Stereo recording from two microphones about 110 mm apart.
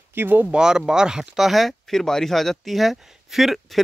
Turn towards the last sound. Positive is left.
turn(degrees=0)  # may be behind; listen again after turning